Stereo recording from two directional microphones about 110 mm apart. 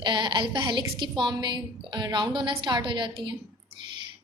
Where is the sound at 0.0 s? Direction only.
45° right (ahead or behind).